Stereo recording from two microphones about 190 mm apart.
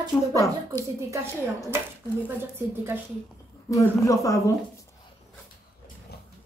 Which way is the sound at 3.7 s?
15° left (ahead or behind).